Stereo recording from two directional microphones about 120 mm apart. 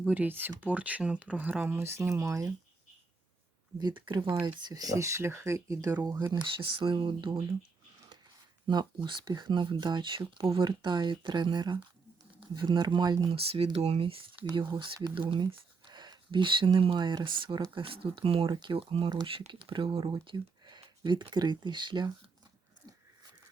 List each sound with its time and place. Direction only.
0.0 s speech: 15° right (ahead or behind)
3.8 s speech: 40° right (ahead or behind)
4.6 s speech: 30° right (ahead or behind)
6.3 s speech: 40° right (ahead or behind)
8.6 s speech: 40° right (ahead or behind)
13.3 s speech: 55° right (ahead or behind)
14.4 s speech: 40° right (ahead or behind)
20.2 s a sound: 35° right (ahead or behind)
21.0 s speech: 40° right (ahead or behind)